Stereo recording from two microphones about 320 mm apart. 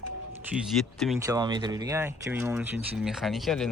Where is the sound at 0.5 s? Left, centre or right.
Centre.